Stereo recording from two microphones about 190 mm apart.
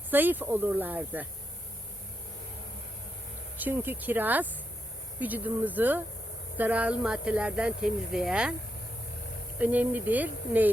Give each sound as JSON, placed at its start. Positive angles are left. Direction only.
{"t": 0.1, "sound": "speech", "side_deg": -10}
{"t": 3.6, "sound": "speech", "side_deg": -10}
{"t": 9.6, "sound": "speech", "side_deg": -10}